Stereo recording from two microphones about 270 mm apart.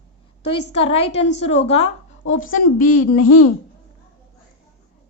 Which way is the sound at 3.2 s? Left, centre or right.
Left.